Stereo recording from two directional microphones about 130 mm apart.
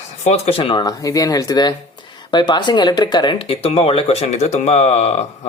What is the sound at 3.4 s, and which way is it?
Speech, 50° left (ahead or behind).